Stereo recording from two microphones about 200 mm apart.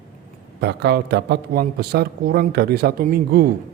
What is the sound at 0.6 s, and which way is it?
Speech, 55° right (ahead or behind).